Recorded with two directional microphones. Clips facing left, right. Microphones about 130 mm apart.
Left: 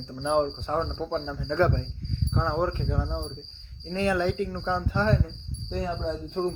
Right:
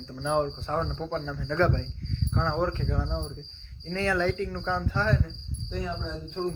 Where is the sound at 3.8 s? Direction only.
15° left (ahead or behind).